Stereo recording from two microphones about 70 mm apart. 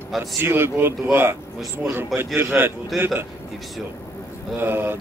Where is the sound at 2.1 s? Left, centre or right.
Right.